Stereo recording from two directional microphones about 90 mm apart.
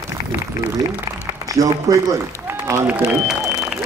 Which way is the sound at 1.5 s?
40° right (ahead or behind).